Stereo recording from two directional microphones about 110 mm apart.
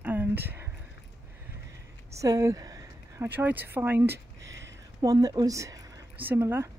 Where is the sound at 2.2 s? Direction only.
30° right (ahead or behind).